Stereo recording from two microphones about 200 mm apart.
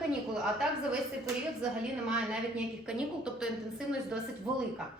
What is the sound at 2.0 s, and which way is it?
A woman's voice, 5° right (ahead or behind).